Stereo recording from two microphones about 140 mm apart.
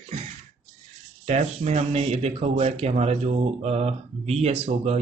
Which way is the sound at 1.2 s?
55° right (ahead or behind).